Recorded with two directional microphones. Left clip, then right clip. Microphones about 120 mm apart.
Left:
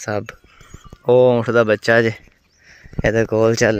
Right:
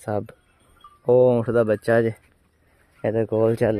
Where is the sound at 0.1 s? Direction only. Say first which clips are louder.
Left 3 dB; 10° right (ahead or behind).